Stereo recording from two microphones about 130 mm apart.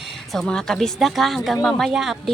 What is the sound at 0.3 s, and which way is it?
Speech, 5° left (ahead or behind).